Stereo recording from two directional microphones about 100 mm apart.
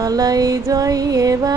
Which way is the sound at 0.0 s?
40° right (ahead or behind).